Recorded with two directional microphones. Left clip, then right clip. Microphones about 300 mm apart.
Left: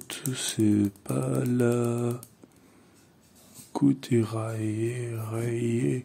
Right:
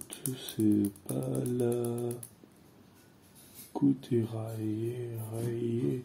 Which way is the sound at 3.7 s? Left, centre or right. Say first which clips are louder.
Left 4 dB; left.